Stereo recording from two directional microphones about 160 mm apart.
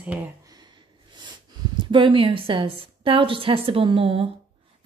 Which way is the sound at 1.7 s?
30° right (ahead or behind).